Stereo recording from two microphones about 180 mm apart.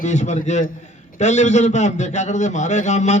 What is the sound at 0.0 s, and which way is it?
A man's voice, 40° left (ahead or behind).